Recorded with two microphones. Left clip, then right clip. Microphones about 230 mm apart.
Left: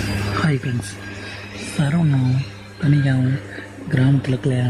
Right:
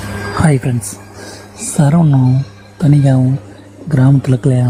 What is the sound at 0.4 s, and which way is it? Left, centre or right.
Speech, right.